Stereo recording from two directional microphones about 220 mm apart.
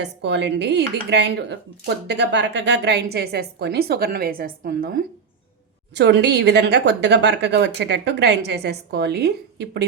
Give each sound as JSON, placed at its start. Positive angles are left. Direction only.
{"t": 0.0, "sound": "speech", "side_deg": -50}
{"t": 5.9, "sound": "speech", "side_deg": -50}